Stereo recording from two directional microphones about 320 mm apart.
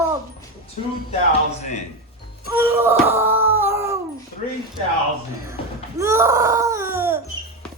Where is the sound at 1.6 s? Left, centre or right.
Left.